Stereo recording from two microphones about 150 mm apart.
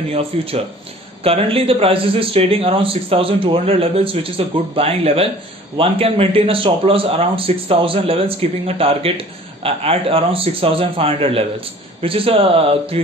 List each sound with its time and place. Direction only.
0.1 s speech: 40° right (ahead or behind)